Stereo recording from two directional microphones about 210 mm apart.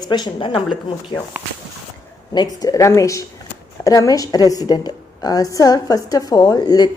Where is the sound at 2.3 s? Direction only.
20° left (ahead or behind).